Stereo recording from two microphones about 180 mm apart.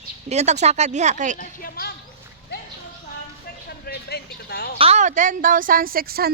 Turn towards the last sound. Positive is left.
turn(degrees=-55)  # may be behind; listen again after turning